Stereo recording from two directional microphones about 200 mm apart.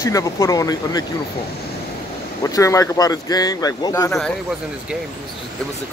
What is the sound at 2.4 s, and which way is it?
Speech, 15° left (ahead or behind).